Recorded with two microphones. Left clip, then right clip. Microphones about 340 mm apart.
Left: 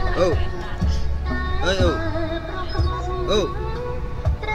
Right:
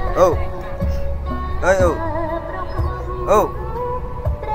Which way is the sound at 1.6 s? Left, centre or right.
Centre.